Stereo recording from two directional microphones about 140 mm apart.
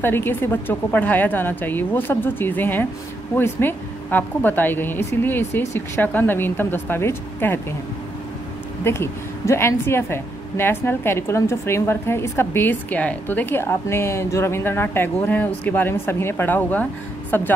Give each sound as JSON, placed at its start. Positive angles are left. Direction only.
{"t": 0.0, "sound": "a woman's voice", "side_deg": 15}
{"t": 8.8, "sound": "a woman's voice", "side_deg": 20}